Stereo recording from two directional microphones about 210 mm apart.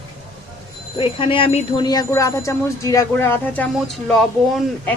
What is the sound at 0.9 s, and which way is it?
A woman's voice, 25° left (ahead or behind).